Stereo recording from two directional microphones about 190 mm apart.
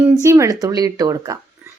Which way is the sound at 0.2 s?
15° right (ahead or behind).